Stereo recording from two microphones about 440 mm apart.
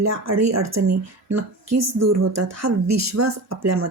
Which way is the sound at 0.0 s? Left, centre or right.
Right.